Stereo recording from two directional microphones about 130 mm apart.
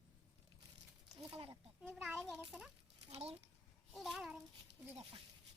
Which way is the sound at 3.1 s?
55° right (ahead or behind).